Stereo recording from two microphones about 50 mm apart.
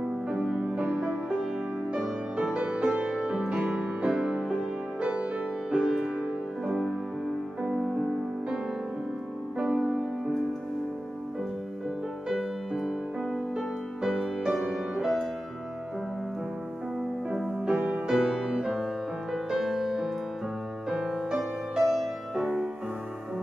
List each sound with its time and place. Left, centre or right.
0.4 s music: right
2.0 s music: centre
5.7 s music: centre
9.6 s music: right
12.3 s music: centre
17.6 s music: centre